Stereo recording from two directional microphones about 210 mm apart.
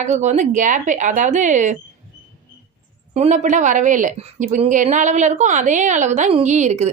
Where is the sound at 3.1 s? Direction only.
30° right (ahead or behind).